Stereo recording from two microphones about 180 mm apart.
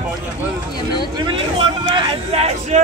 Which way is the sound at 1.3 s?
30° right (ahead or behind).